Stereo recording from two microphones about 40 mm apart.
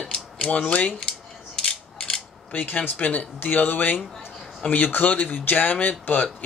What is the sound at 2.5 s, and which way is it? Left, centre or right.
Speech, left.